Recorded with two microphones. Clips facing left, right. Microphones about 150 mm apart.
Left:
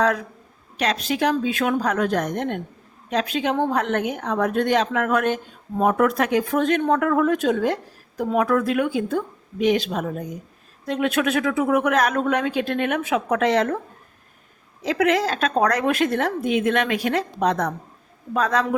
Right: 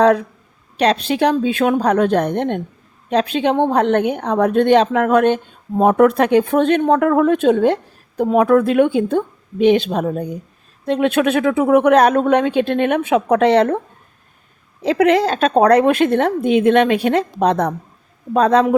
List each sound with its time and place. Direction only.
0.0 s a woman's voice: 30° right (ahead or behind)
14.8 s a woman's voice: 30° right (ahead or behind)